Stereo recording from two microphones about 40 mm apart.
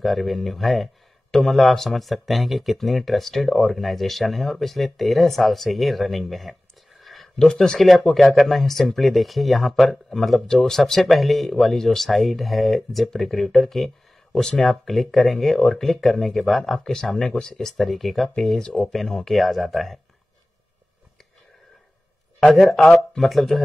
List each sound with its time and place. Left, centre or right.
0.0 s speech: centre
7.0 s a sound: centre
7.3 s speech: centre
18.3 s speech: centre
22.5 s speech: centre